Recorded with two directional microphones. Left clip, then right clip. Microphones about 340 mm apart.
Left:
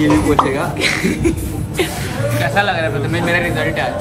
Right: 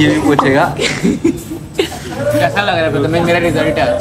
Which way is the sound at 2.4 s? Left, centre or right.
Centre.